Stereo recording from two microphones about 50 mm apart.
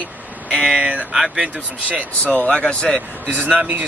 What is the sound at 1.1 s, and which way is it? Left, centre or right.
Speech, centre.